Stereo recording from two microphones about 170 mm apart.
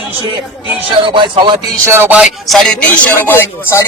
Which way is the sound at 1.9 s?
10° right (ahead or behind).